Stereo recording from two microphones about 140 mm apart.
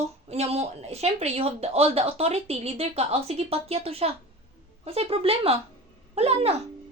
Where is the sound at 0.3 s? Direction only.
50° right (ahead or behind).